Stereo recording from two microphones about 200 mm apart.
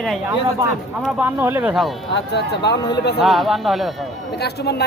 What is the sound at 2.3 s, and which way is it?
Speech, 55° left (ahead or behind).